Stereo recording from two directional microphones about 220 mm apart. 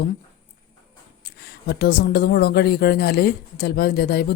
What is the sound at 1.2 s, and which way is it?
Speech, 45° left (ahead or behind).